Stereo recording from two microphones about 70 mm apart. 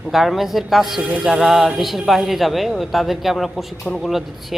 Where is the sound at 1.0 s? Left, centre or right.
Centre.